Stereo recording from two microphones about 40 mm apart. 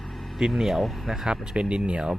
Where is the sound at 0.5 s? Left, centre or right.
Centre.